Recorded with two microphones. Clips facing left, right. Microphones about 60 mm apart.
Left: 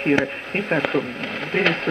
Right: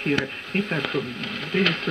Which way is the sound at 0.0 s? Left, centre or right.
Left.